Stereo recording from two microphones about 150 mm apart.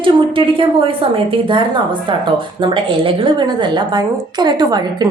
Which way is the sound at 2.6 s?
35° right (ahead or behind).